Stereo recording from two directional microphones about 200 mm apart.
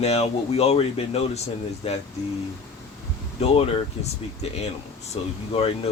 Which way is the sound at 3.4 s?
30° left (ahead or behind).